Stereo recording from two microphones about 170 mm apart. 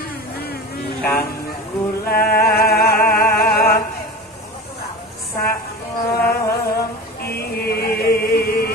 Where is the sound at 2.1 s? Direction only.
65° left (ahead or behind).